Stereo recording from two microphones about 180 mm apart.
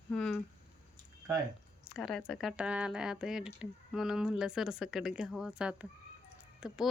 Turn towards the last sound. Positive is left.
turn(degrees=-5)  # may be behind; listen again after turning